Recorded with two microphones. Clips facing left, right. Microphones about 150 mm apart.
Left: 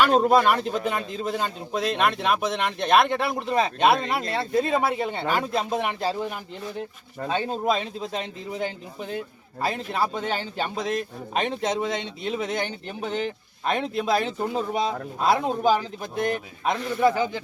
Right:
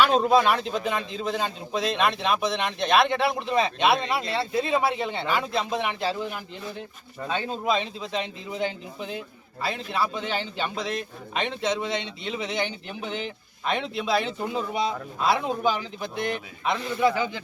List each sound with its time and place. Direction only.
0.0 s a man's voice: 50° left (ahead or behind)
7.3 s a man's voice: 45° left (ahead or behind)